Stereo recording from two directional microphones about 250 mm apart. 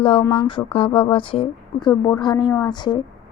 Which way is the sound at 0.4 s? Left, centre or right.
Left.